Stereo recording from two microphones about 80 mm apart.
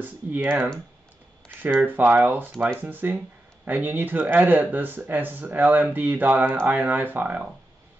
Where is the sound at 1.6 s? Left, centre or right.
Right.